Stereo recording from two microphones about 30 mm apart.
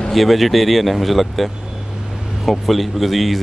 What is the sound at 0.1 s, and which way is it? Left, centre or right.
Speech, centre.